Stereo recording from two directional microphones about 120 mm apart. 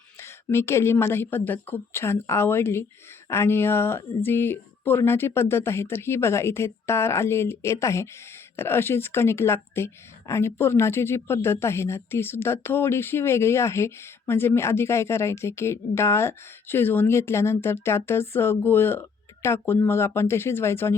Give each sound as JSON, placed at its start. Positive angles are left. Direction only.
{"t": 0.2, "sound": "speech", "side_deg": 20}